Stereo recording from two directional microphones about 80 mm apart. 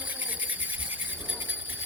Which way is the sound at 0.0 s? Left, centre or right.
Centre.